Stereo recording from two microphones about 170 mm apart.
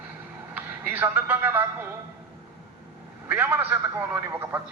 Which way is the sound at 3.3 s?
10° right (ahead or behind).